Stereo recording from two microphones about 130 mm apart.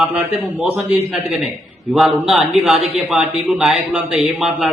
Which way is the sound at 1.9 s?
10° right (ahead or behind).